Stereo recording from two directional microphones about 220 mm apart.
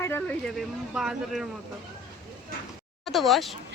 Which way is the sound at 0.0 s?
10° left (ahead or behind).